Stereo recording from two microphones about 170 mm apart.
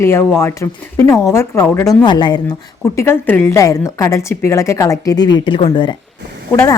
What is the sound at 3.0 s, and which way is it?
A woman's voice, 10° left (ahead or behind).